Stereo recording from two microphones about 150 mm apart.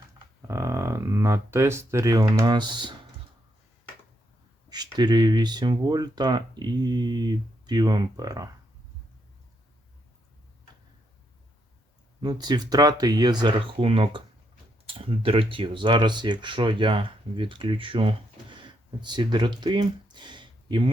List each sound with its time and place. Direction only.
0.4 s speech: 20° right (ahead or behind)
4.7 s speech: 25° right (ahead or behind)
12.2 s speech: 30° right (ahead or behind)